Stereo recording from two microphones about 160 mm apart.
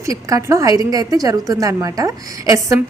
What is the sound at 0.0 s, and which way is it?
A woman's voice, 20° right (ahead or behind).